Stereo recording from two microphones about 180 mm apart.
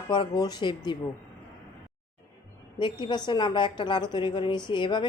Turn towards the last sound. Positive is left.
turn(degrees=25)  # may be behind; listen again after turning